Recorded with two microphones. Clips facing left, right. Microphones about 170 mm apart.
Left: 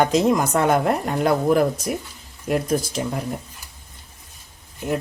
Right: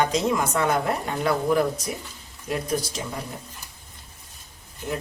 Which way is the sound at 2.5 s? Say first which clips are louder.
Left 6 dB; 60° left (ahead or behind).